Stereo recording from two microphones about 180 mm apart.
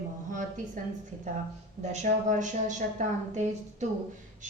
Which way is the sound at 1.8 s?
40° right (ahead or behind).